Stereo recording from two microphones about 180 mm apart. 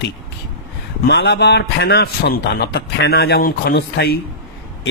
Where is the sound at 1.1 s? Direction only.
70° left (ahead or behind).